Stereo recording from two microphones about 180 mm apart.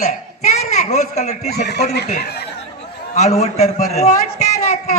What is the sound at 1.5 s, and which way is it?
Speech, 65° left (ahead or behind).